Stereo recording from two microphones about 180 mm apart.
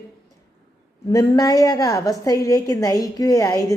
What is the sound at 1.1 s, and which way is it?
A woman's voice, 20° left (ahead or behind).